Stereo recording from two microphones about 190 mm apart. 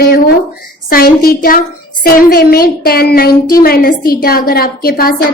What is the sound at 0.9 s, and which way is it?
A child's voice, 50° left (ahead or behind).